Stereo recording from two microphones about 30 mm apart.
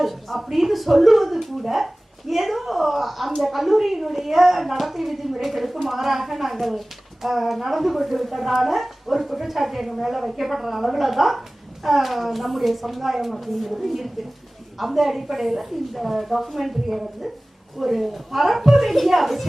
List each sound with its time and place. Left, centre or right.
0.0 s a woman's voice: centre